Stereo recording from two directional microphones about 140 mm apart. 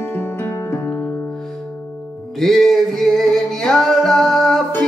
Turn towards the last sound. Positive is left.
turn(degrees=0)  # may be behind; listen again after turning